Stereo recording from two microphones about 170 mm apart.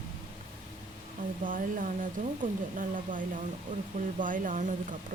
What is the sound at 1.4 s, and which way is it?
Speech, 50° right (ahead or behind).